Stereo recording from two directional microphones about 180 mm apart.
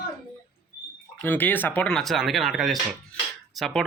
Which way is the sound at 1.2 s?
10° left (ahead or behind).